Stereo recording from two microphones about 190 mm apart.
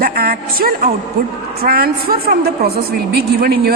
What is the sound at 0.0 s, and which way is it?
A woman's voice, 50° right (ahead or behind).